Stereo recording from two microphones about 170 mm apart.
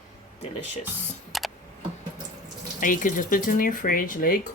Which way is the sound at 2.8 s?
50° left (ahead or behind).